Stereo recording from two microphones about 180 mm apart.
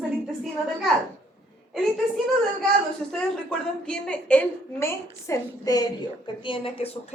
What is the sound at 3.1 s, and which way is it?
A woman's voice, 5° left (ahead or behind).